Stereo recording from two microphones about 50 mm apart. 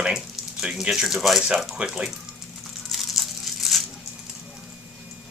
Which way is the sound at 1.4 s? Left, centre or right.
Centre.